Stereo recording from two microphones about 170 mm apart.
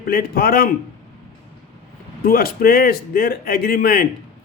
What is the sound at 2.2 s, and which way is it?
Speech, 60° left (ahead or behind).